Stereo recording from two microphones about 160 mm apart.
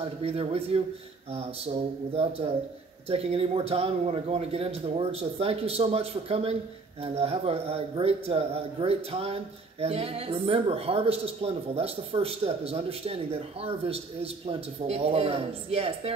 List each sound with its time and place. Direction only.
0.0 s speech: 35° right (ahead or behind)